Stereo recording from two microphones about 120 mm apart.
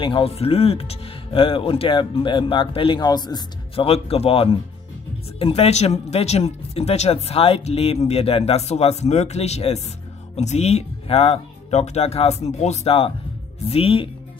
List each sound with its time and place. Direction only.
0.0 s speech: 50° left (ahead or behind)
3.0 s speech: 35° left (ahead or behind)
3.7 s speech: 55° left (ahead or behind)